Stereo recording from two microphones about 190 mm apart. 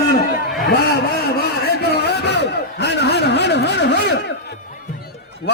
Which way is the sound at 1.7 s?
60° left (ahead or behind).